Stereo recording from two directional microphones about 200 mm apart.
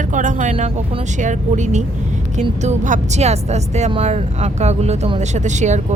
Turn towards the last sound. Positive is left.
turn(degrees=-35)  # may be behind; listen again after turning